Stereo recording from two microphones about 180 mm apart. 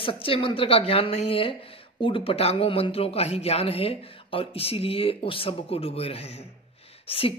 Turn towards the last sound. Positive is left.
turn(degrees=30)  # may be behind; listen again after turning